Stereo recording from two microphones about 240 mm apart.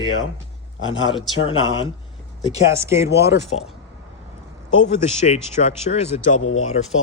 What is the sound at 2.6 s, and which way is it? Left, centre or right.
Speech, centre.